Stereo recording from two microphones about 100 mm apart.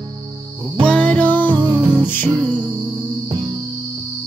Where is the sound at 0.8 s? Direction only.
10° left (ahead or behind).